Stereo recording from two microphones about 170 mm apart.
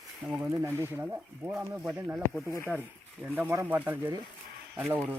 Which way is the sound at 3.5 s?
15° right (ahead or behind).